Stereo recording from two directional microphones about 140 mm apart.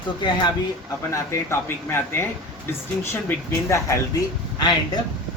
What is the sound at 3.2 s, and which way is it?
Speech, 20° left (ahead or behind).